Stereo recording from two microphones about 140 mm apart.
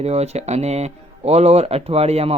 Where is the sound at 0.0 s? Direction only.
50° right (ahead or behind).